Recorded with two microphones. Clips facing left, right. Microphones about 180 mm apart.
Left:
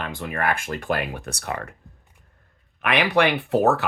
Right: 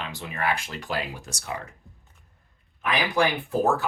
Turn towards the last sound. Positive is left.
turn(degrees=75)  # may be behind; listen again after turning